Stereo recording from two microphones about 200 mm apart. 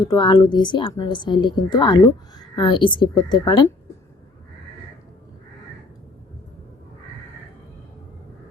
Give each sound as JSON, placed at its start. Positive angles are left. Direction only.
{"t": 0.1, "sound": "a woman's voice", "side_deg": 20}